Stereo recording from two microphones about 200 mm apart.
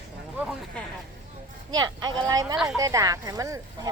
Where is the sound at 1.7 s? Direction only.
20° right (ahead or behind).